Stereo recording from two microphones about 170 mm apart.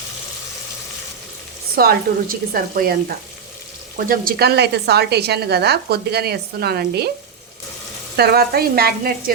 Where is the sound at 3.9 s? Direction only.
60° right (ahead or behind).